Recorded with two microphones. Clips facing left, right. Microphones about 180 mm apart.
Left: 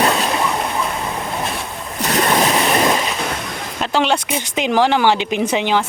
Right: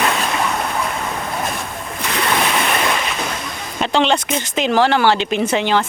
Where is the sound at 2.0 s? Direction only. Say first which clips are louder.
Left 4 dB; 40° left (ahead or behind).